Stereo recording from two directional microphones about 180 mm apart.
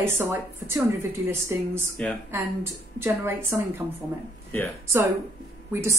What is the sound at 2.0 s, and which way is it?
Speech, 5° left (ahead or behind).